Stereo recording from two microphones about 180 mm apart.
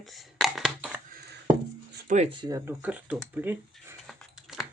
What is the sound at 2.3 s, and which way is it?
Speech, 25° right (ahead or behind).